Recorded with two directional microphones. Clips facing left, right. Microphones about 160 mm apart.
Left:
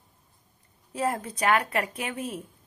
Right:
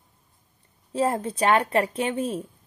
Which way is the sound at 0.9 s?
30° right (ahead or behind).